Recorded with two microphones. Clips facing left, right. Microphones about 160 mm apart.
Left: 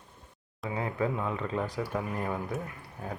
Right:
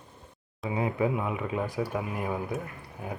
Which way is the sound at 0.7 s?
15° right (ahead or behind).